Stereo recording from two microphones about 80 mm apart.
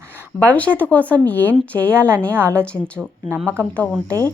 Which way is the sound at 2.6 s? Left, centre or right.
Centre.